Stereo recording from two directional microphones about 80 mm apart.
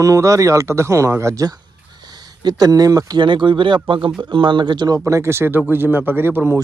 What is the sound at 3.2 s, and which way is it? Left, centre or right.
Speech, right.